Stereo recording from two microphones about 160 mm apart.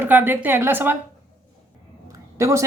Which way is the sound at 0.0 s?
15° right (ahead or behind).